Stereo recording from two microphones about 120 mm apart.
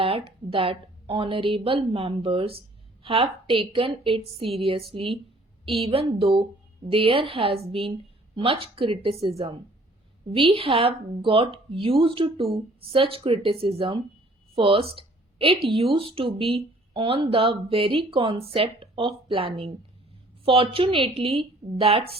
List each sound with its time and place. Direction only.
0.0 s a woman's voice: 50° right (ahead or behind)
10.3 s a woman's voice: 50° right (ahead or behind)